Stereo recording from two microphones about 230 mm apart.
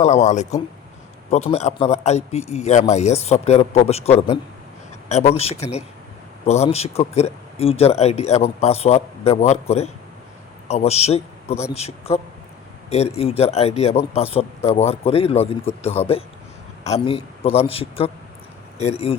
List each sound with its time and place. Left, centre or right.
0.0 s a man's voice: left